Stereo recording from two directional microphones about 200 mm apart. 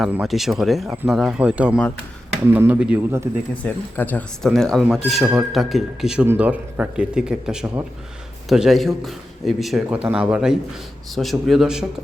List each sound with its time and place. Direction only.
0.0 s speech: centre (ahead or behind)
3.6 s speech: 10° left (ahead or behind)